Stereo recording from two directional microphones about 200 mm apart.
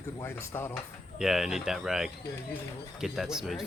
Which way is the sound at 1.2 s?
Centre (ahead or behind).